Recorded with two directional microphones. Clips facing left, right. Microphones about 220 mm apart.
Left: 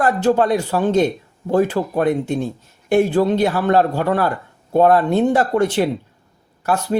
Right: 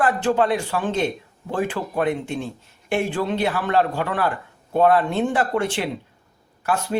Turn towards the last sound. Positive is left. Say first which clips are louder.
# left 4 dB
turn(degrees=40)  # may be behind; listen again after turning